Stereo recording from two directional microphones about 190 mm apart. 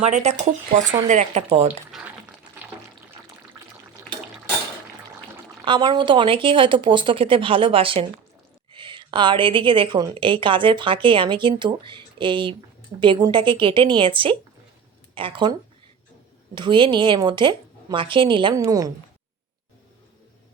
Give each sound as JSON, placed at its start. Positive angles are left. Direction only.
{"t": 0.0, "sound": "speech", "side_deg": -35}
{"t": 1.9, "sound": "boiling", "side_deg": -5}
{"t": 3.6, "sound": "water", "side_deg": -20}
{"t": 5.6, "sound": "a woman's voice", "side_deg": -25}
{"t": 16.6, "sound": "a woman's voice", "side_deg": -25}